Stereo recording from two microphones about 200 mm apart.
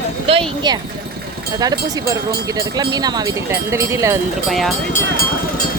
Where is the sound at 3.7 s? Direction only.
15° right (ahead or behind).